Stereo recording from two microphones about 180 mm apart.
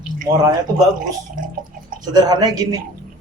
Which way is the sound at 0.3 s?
20° right (ahead or behind).